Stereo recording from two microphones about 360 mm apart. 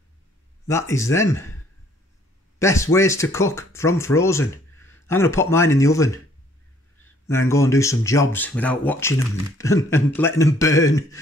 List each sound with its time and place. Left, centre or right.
0.7 s speech: centre
2.6 s speech: centre
7.2 s speech: centre